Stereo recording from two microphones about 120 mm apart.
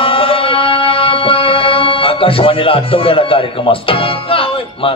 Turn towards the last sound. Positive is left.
turn(degrees=50)  # may be behind; listen again after turning